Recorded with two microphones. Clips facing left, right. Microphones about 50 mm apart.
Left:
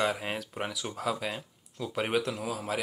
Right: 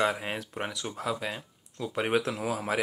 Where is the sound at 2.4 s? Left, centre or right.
Right.